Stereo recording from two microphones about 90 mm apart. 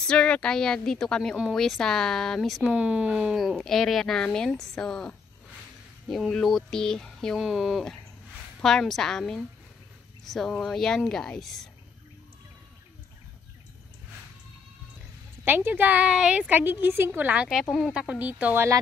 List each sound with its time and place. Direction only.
0.0 s a woman's voice: 10° left (ahead or behind)
2.7 s speech: 10° right (ahead or behind)
3.3 s speech: centre (ahead or behind)
6.3 s speech: 5° left (ahead or behind)
7.3 s speech: 5° right (ahead or behind)
15.4 s a woman's voice: 20° right (ahead or behind)
17.6 s speech: centre (ahead or behind)
17.9 s speech: 10° right (ahead or behind)